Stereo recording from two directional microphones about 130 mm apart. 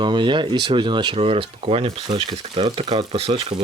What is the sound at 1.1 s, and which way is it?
Speech, 50° right (ahead or behind).